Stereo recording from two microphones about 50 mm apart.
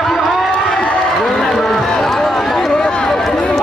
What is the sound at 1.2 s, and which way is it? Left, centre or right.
Run, centre.